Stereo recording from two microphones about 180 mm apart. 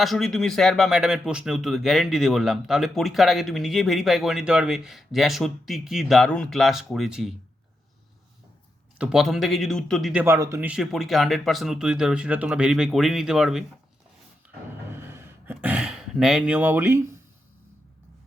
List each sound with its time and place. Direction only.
0.0 s speech: centre (ahead or behind)
9.0 s speech: 5° right (ahead or behind)
14.8 s a sound: 15° right (ahead or behind)